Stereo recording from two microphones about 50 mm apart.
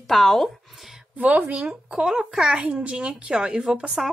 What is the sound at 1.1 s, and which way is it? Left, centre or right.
Speech, right.